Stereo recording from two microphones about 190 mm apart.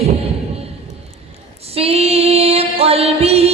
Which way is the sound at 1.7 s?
30° right (ahead or behind).